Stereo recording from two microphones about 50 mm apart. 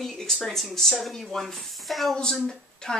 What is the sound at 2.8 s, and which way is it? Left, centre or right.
Speech, centre.